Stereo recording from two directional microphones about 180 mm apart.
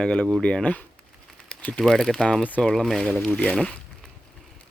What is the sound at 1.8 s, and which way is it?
Speech, 5° left (ahead or behind).